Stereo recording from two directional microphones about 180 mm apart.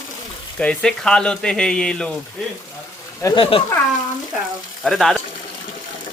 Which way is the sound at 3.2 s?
15° left (ahead or behind).